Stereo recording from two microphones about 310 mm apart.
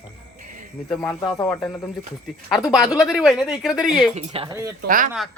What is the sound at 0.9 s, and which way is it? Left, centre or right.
Speech, centre.